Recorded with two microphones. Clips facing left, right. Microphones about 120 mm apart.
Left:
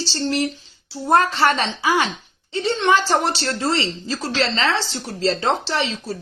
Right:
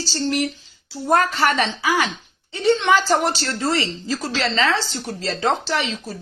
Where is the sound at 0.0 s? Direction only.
30° left (ahead or behind).